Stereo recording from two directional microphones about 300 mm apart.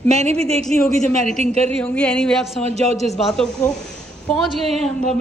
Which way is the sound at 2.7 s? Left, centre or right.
Right.